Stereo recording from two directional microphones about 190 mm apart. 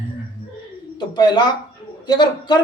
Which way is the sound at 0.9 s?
20° left (ahead or behind).